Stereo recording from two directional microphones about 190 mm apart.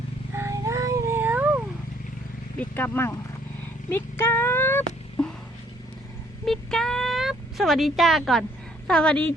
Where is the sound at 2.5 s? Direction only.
10° left (ahead or behind).